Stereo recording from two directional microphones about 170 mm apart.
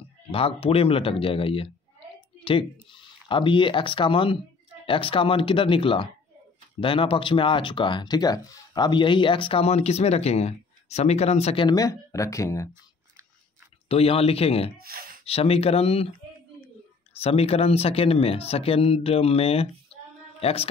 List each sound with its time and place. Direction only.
0.3 s speech: 35° left (ahead or behind); by 12.6 s 15° left (ahead or behind)
13.8 s speech: 35° left (ahead or behind)
14.8 s a sound: 60° right (ahead or behind)
15.2 s speech: 35° left (ahead or behind)
17.2 s speech: 35° left (ahead or behind)